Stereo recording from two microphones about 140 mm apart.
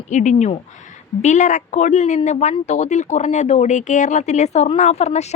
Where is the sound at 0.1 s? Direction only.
60° left (ahead or behind).